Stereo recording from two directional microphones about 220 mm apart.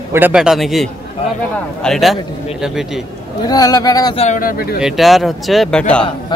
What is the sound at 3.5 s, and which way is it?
Speech, 15° left (ahead or behind).